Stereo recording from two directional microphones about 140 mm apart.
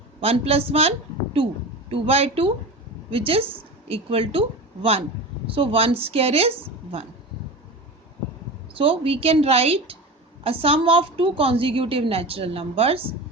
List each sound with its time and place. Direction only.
0.2 s a woman's voice: 45° right (ahead or behind)
8.7 s a woman's voice: 40° right (ahead or behind)